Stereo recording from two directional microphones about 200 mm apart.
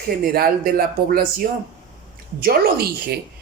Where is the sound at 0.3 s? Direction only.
50° right (ahead or behind).